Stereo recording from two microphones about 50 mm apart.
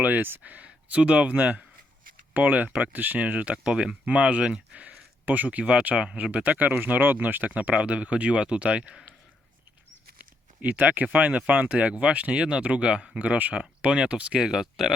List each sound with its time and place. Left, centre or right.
0.0 s speech: right
10.2 s speech: right
13.1 s speech: right
13.6 s speech: centre
14.3 s speech: centre